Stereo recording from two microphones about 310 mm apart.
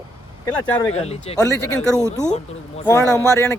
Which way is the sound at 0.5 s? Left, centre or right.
Centre.